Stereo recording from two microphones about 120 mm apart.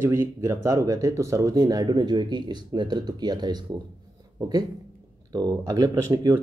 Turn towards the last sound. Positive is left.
turn(degrees=-25)  # may be behind; listen again after turning